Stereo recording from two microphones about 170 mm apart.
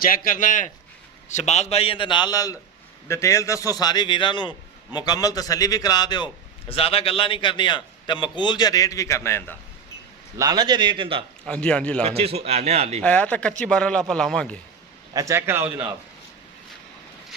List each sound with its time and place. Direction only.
0.0 s a man's voice: 55° left (ahead or behind); by 9.6 s 15° left (ahead or behind)
10.3 s a man's voice: 20° right (ahead or behind)
11.4 s a man's voice: 5° left (ahead or behind)
12.0 s speech: 35° right (ahead or behind)
13.0 s a man's voice: 10° left (ahead or behind)
15.1 s a man's voice: 20° right (ahead or behind)